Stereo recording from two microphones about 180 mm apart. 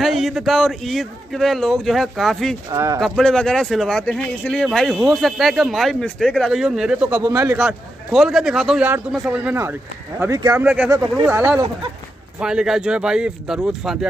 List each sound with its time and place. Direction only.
0.0 s speech: centre (ahead or behind)
2.7 s speech: 15° right (ahead or behind)
3.0 s speech: 5° left (ahead or behind); by 10.6 s 20° right (ahead or behind)
10.6 s speech: 5° right (ahead or behind)